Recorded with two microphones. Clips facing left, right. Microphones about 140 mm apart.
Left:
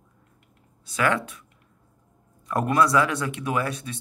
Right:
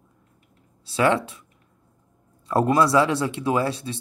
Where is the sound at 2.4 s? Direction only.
25° right (ahead or behind).